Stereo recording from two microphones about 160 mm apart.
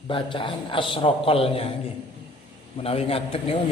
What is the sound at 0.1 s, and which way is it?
Mantra, 30° left (ahead or behind).